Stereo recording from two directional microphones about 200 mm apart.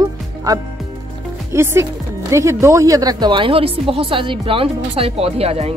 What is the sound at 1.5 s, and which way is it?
Speech, 15° right (ahead or behind).